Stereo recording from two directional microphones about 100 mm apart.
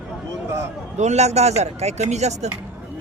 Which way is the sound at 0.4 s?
25° right (ahead or behind).